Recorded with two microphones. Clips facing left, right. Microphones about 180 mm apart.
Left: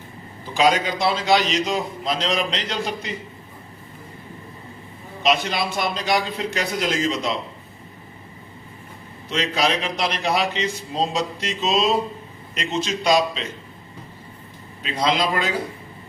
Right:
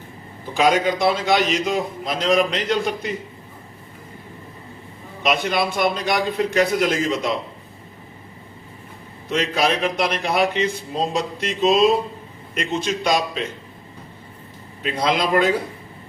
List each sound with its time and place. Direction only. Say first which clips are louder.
0.9 s a man's voice: right 1 dB; 50° right (ahead or behind)
5.2 s a man's voice: right 1 dB; 55° right (ahead or behind)
9.3 s a man's voice: right 2 dB; 55° right (ahead or behind)
14.8 s a man's voice: right 1 dB; 55° right (ahead or behind)